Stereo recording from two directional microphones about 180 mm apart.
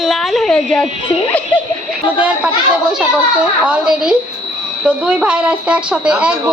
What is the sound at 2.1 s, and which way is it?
Speech, 5° right (ahead or behind).